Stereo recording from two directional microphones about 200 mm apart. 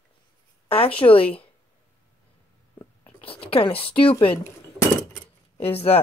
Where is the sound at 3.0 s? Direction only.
25° left (ahead or behind).